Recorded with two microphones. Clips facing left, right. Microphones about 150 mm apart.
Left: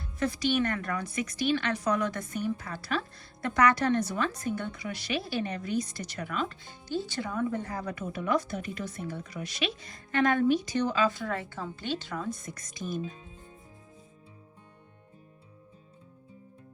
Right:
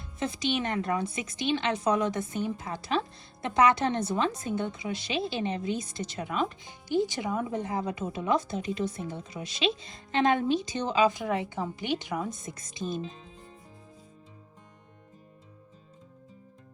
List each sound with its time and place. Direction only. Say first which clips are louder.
0.2 s speech: left 2 dB; 20° right (ahead or behind)